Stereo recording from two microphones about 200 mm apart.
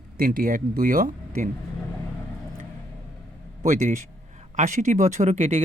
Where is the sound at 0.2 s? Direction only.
45° right (ahead or behind).